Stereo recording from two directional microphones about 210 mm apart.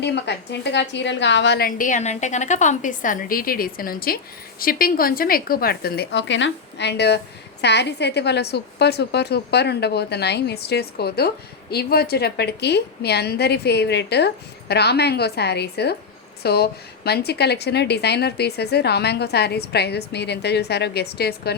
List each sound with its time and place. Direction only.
0.0 s a woman's voice: 55° left (ahead or behind)